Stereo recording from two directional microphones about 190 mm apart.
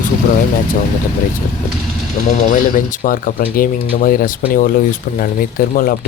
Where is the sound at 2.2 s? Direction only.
45° left (ahead or behind).